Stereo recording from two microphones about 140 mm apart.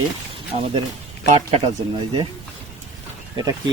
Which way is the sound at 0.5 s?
45° right (ahead or behind).